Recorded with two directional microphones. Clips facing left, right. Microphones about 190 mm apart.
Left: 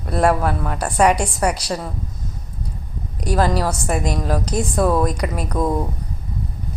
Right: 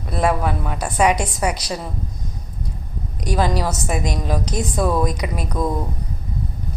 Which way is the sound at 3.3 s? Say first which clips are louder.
Left 2 dB; centre (ahead or behind).